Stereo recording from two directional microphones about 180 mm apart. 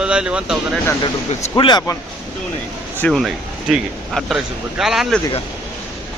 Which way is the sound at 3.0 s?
Centre (ahead or behind).